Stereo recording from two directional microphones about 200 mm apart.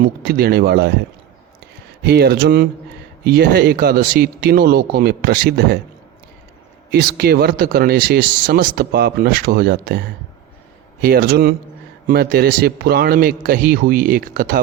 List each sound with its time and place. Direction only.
0.0 s speech: 50° right (ahead or behind)
2.0 s speech: 50° right (ahead or behind)
6.9 s speech: 55° right (ahead or behind)
11.0 s speech: 50° right (ahead or behind)